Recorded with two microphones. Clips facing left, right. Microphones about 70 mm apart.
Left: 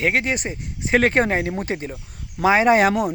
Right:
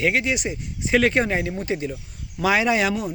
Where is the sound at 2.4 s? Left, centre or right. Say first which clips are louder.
Left 5 dB; left.